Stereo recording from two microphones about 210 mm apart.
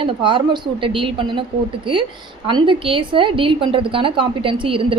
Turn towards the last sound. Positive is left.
turn(degrees=-25)  # may be behind; listen again after turning